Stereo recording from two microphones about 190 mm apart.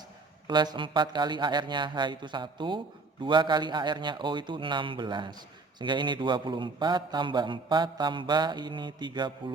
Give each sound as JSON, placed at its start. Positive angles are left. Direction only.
{"t": 0.4, "sound": "speech", "side_deg": -20}